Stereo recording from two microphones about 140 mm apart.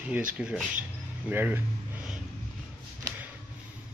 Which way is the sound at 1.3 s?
15° right (ahead or behind).